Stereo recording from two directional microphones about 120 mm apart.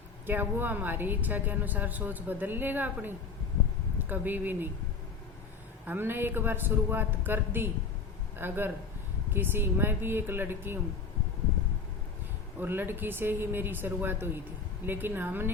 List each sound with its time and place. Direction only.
0.3 s a woman's voice: 15° right (ahead or behind)
5.8 s a woman's voice: 15° right (ahead or behind)
12.5 s a woman's voice: 15° right (ahead or behind)